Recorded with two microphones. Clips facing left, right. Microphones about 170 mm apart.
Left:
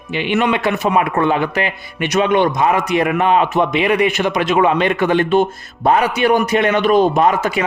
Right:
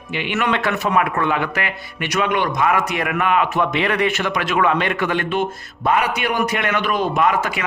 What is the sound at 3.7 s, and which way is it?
A man's voice, 15° left (ahead or behind).